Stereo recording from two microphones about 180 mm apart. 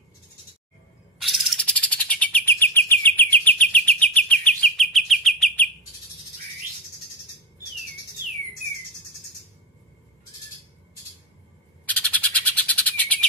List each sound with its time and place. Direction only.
1.2 s bird: 5° left (ahead or behind)
11.8 s bird: 10° left (ahead or behind)